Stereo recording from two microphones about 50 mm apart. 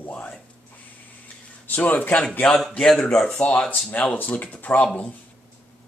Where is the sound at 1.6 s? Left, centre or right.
Left.